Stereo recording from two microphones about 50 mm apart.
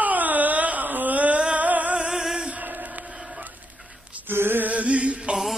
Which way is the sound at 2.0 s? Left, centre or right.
Centre.